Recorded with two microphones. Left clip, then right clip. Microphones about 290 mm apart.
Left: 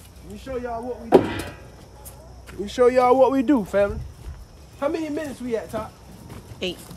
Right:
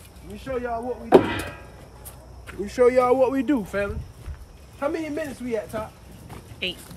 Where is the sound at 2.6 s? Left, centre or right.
Centre.